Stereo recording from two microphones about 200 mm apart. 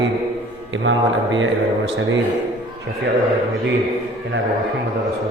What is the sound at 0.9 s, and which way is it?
Speech, 70° right (ahead or behind).